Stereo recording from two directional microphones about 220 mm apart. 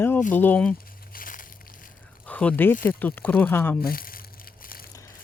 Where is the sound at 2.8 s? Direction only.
10° left (ahead or behind).